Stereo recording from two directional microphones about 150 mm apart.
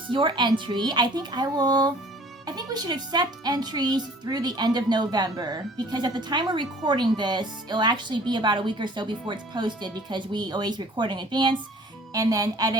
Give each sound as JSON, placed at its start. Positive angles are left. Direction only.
{"t": 0.1, "sound": "speech", "side_deg": -30}